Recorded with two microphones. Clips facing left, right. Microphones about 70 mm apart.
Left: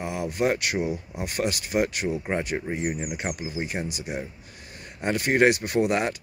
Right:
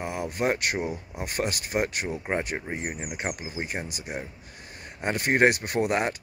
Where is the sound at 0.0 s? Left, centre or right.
Right.